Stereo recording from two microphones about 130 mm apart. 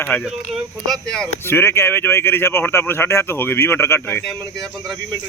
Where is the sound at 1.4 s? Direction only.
20° left (ahead or behind).